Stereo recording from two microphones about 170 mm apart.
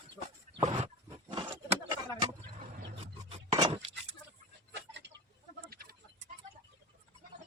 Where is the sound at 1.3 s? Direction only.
30° right (ahead or behind).